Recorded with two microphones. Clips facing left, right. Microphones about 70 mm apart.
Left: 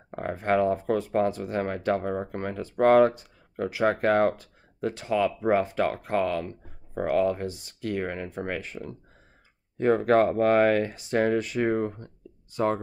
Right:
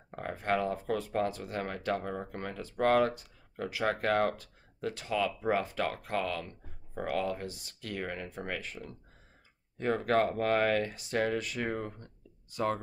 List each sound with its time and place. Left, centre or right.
0.1 s speech: left